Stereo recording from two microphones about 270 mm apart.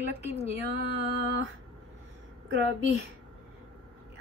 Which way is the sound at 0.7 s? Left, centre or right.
Right.